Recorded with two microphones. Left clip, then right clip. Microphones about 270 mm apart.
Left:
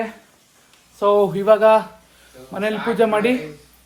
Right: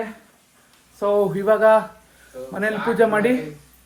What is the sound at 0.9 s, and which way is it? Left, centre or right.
Speech, centre.